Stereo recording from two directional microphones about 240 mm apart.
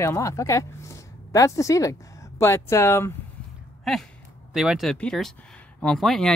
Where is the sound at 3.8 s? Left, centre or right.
Centre.